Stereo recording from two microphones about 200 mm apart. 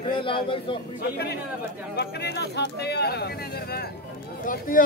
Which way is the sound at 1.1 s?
55° left (ahead or behind).